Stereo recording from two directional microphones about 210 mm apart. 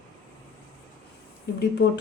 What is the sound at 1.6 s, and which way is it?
Speech, 50° left (ahead or behind).